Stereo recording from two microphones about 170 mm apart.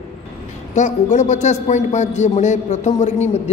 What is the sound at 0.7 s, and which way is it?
A man's voice, 45° left (ahead or behind).